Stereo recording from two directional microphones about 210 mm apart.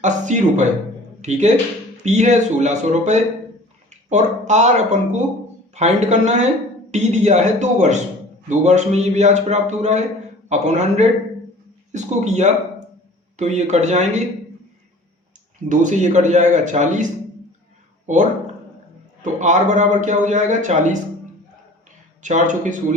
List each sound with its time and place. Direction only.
0.0 s a man's voice: 35° right (ahead or behind)
15.7 s a man's voice: 35° right (ahead or behind)
22.2 s a man's voice: 35° right (ahead or behind)